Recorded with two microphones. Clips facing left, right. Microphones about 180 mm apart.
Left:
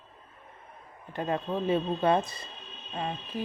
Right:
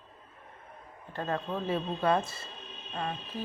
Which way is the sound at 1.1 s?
15° left (ahead or behind).